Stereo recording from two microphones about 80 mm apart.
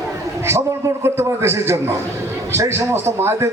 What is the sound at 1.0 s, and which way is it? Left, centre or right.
A man's voice, right.